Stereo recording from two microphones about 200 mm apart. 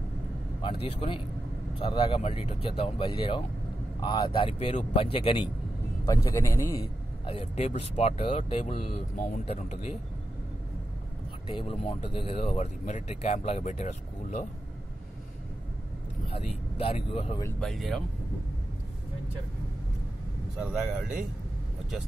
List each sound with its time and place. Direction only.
0.6 s speech: 25° left (ahead or behind)
6.0 s a man's voice: 15° left (ahead or behind)
7.2 s speech: 30° left (ahead or behind)
11.4 s speech: 30° left (ahead or behind)
16.3 s speech: 30° left (ahead or behind)
17.6 s speech: centre (ahead or behind)
20.5 s speech: 5° right (ahead or behind)